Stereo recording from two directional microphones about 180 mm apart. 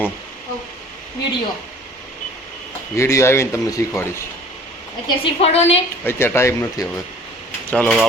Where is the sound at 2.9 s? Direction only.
15° left (ahead or behind).